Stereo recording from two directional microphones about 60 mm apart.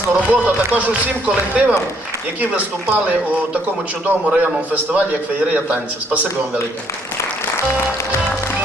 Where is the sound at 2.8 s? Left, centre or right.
Right.